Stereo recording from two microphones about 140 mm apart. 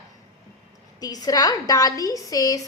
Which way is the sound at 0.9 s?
25° left (ahead or behind).